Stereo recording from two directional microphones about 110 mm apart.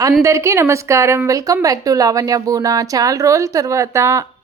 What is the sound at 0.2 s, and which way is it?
A woman's voice, 25° right (ahead or behind).